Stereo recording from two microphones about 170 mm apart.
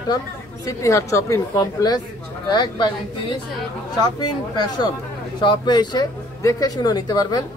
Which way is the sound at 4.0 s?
25° left (ahead or behind).